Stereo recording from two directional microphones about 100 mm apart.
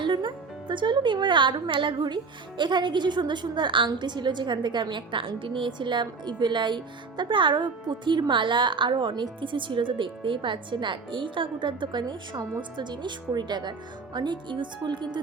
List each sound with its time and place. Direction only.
0.0 s speech: 55° right (ahead or behind)